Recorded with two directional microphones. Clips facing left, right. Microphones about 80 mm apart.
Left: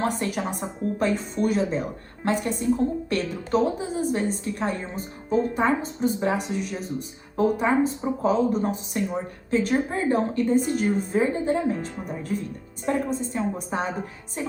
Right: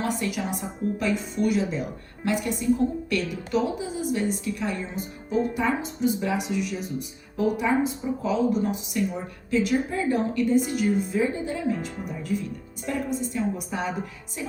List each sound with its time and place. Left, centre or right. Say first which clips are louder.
0.0 s a woman's voice: left 2 dB; left